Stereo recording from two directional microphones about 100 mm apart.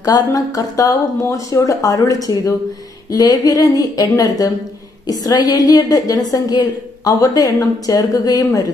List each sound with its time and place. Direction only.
0.0 s a woman's voice: 35° left (ahead or behind)